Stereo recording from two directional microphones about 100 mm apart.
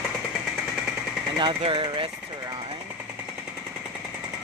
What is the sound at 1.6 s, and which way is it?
Speech, 60° right (ahead or behind).